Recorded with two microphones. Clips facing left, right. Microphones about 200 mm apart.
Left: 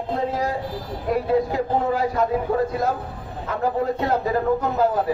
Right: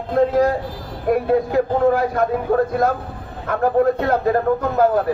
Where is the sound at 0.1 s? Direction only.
55° right (ahead or behind).